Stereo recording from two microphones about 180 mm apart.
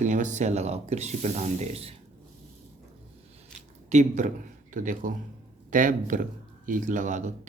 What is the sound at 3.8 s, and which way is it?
A man's voice, 40° right (ahead or behind).